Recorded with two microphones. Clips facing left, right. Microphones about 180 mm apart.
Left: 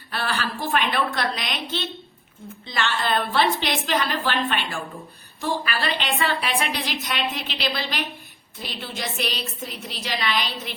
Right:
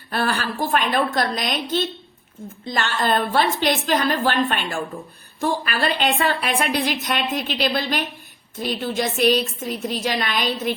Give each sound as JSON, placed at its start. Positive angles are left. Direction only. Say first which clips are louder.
{"t": 0.1, "sound": "speech", "louder": "right 4 dB", "side_deg": -45}